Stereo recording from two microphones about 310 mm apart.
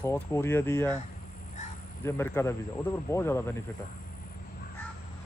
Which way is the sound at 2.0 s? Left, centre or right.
Centre.